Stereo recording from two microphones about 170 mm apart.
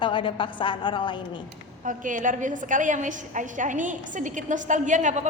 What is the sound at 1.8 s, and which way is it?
A woman's voice, 50° right (ahead or behind).